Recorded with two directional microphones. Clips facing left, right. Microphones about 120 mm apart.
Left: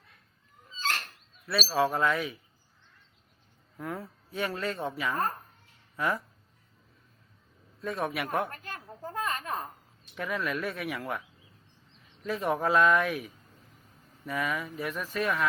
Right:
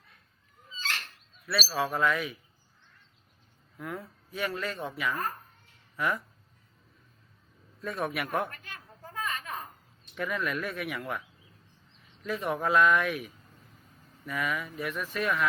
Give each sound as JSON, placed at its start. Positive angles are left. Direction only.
{"t": 0.8, "sound": "a sound", "side_deg": 45}
{"t": 1.6, "sound": "speech", "side_deg": 25}
{"t": 3.8, "sound": "speech", "side_deg": 30}
{"t": 8.0, "sound": "speech", "side_deg": 25}
{"t": 8.4, "sound": "a sound", "side_deg": 35}
{"t": 10.2, "sound": "speech", "side_deg": 30}
{"t": 12.2, "sound": "speech", "side_deg": 30}